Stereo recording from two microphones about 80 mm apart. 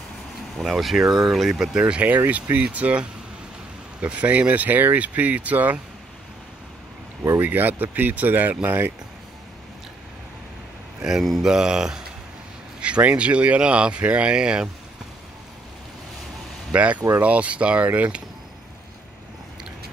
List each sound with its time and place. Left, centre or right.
0.6 s speech: centre
7.3 s speech: right
11.1 s speech: centre
16.7 s speech: centre